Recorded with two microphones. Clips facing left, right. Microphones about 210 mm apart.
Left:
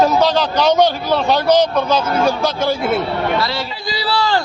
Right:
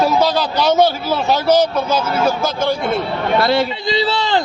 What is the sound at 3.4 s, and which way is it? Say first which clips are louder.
Speech: right 7 dB; 55° right (ahead or behind).